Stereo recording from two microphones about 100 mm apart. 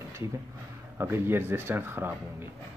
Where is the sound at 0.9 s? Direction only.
20° right (ahead or behind).